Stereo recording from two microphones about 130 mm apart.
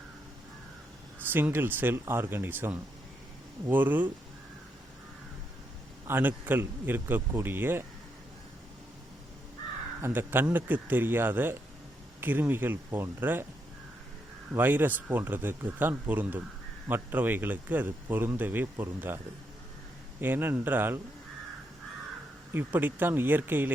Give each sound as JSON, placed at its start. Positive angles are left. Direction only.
{"t": 1.3, "sound": "speech", "side_deg": -15}
{"t": 6.1, "sound": "speech", "side_deg": -15}
{"t": 10.0, "sound": "speech", "side_deg": -15}
{"t": 14.5, "sound": "speech", "side_deg": -15}
{"t": 20.2, "sound": "speech", "side_deg": -15}
{"t": 22.5, "sound": "speech", "side_deg": -15}